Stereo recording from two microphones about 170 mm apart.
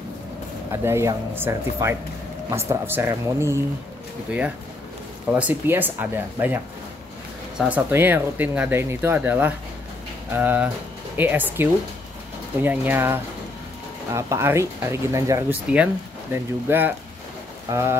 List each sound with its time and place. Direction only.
0.8 s speech: 15° right (ahead or behind)
5.3 s speech: 10° right (ahead or behind)